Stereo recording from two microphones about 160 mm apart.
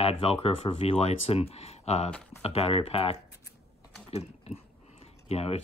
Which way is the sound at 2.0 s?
5° left (ahead or behind).